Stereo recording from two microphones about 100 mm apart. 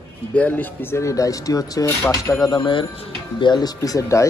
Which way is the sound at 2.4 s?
45° left (ahead or behind).